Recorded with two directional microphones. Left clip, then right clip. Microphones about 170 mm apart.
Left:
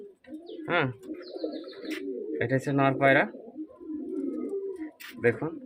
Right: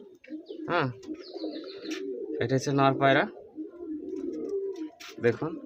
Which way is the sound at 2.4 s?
15° right (ahead or behind).